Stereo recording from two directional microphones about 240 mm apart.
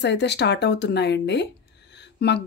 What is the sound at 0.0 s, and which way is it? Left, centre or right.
Speech, left.